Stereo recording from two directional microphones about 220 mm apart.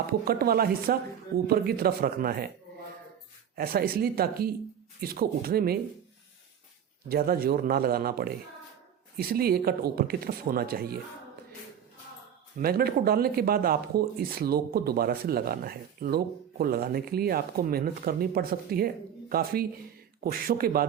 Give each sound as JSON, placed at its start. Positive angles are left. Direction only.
{"t": 0.1, "sound": "speech", "side_deg": -45}
{"t": 3.5, "sound": "speech", "side_deg": -45}
{"t": 7.1, "sound": "speech", "side_deg": -45}
{"t": 12.5, "sound": "speech", "side_deg": -45}